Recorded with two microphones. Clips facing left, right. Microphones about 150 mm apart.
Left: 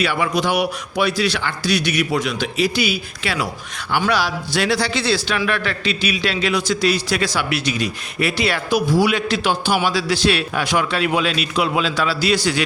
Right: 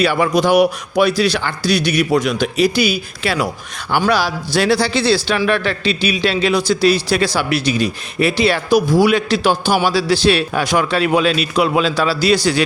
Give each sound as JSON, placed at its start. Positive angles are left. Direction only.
{"t": 0.0, "sound": "a man's voice", "side_deg": -40}
{"t": 8.9, "sound": "a man's voice", "side_deg": -45}